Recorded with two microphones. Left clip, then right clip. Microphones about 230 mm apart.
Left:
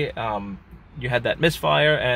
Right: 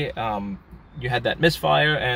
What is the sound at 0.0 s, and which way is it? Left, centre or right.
Speech, centre.